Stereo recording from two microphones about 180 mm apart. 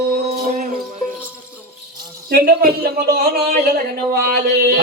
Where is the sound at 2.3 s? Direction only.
55° right (ahead or behind).